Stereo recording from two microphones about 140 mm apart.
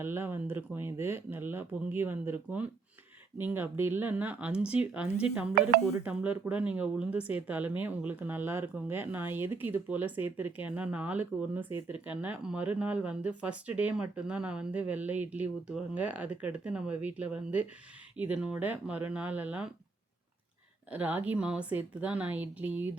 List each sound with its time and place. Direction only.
0.0 s speech: 15° right (ahead or behind)
20.9 s speech: 10° right (ahead or behind)